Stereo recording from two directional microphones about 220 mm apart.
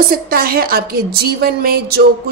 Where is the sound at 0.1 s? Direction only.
40° right (ahead or behind).